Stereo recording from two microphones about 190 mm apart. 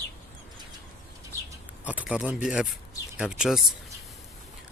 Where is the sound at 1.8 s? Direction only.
10° right (ahead or behind).